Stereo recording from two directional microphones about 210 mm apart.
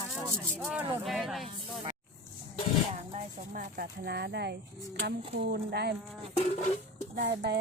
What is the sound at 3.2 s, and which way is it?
Speech, 40° right (ahead or behind).